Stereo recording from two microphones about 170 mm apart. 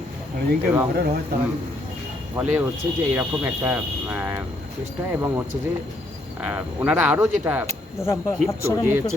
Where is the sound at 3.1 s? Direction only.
15° right (ahead or behind).